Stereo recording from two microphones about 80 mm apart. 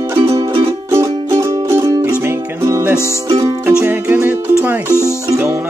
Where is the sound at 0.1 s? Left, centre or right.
Right.